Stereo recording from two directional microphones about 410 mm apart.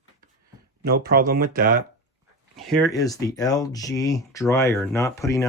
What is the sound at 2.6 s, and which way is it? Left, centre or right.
Speech, centre.